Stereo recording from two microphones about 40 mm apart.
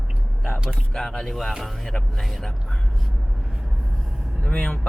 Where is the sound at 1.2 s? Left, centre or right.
Centre.